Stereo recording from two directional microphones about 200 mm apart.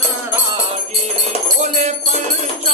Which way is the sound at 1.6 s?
35° right (ahead or behind).